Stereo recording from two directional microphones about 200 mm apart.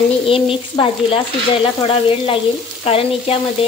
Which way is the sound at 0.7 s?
25° left (ahead or behind).